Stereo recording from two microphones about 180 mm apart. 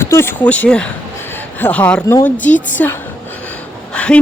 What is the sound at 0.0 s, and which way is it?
A woman's voice, 15° left (ahead or behind).